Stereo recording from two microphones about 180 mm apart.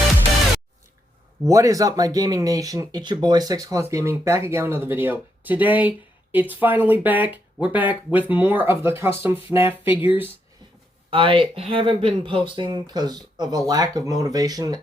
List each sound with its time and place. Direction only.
1.5 s speech: 20° right (ahead or behind)
11.1 s speech: 30° right (ahead or behind)